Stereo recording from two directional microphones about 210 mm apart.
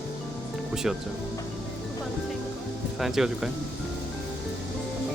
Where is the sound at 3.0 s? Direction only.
Centre (ahead or behind).